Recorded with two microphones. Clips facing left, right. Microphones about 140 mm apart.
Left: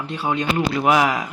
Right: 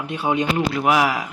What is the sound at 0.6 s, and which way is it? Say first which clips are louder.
Speech: left 4 dB; 5° right (ahead or behind).